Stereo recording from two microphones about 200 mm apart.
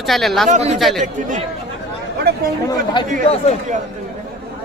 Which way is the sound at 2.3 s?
50° right (ahead or behind).